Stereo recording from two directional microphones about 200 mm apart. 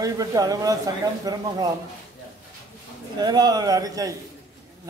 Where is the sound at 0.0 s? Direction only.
20° right (ahead or behind).